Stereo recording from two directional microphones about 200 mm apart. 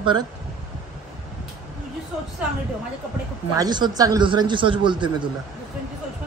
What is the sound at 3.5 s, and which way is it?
A man's voice, 20° right (ahead or behind).